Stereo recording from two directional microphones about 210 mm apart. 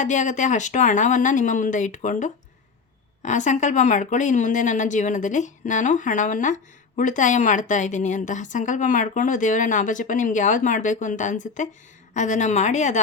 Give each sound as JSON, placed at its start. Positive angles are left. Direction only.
{"t": 0.0, "sound": "speech", "side_deg": 35}